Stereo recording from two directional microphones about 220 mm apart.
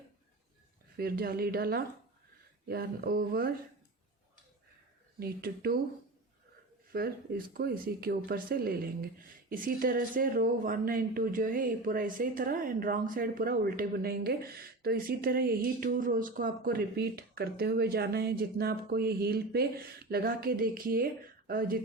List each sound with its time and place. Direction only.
0.9 s speech: 45° right (ahead or behind)
5.2 s speech: 45° right (ahead or behind)
6.9 s speech: 45° right (ahead or behind)